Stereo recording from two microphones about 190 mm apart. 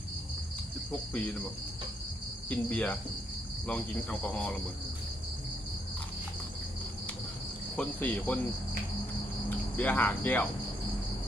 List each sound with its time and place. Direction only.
0.9 s speech: 10° left (ahead or behind)
2.5 s speech: 10° left (ahead or behind)
7.8 s speech: 10° left (ahead or behind)
9.7 s speech: 10° left (ahead or behind)